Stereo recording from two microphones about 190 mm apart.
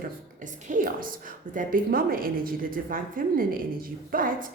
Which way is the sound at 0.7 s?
45° right (ahead or behind).